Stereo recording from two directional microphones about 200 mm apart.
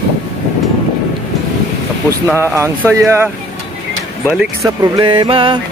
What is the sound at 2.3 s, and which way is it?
Speech, 15° right (ahead or behind).